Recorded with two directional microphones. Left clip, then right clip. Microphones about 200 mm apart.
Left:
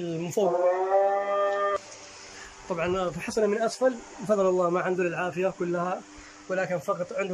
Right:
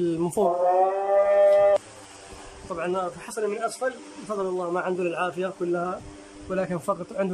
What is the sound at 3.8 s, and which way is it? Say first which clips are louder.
A man's voice: left 4 dB; 15° left (ahead or behind).